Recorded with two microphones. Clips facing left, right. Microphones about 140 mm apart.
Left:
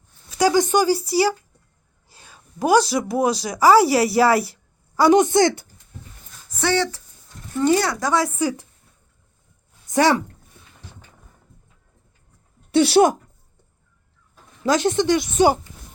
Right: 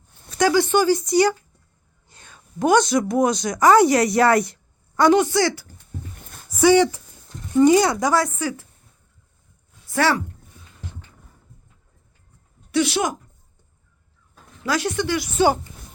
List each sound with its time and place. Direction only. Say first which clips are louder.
0.3 s a sound: even; 10° left (ahead or behind)
1.0 s speech: right 2 dB; 5° left (ahead or behind)
2.1 s a sound: right 3 dB; 10° left (ahead or behind)
3.1 s speech: right 1 dB; 5° left (ahead or behind)
6.5 s speech: right 7 dB; 10° right (ahead or behind)
8.4 s speech: left 4 dB; 15° left (ahead or behind)
9.8 s a sound: left 3 dB; 15° left (ahead or behind)
12.7 s speech: left 6 dB; 35° left (ahead or behind)
14.6 s speech: left 4 dB; 25° left (ahead or behind)